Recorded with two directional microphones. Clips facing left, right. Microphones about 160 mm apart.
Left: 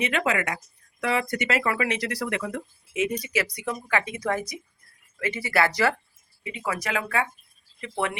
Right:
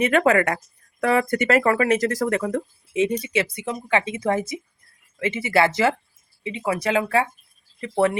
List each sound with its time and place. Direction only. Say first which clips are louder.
0.0 s speech: right 8 dB; 50° right (ahead or behind)